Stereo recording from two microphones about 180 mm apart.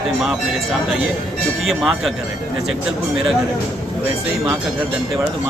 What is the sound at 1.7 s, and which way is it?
Speech, centre (ahead or behind).